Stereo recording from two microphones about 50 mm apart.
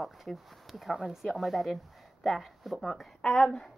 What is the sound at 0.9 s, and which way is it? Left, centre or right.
Speech, centre.